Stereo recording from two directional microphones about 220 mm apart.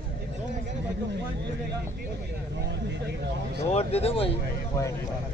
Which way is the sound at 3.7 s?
25° left (ahead or behind).